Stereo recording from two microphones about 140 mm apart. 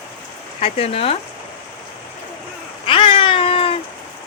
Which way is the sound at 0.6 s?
45° left (ahead or behind).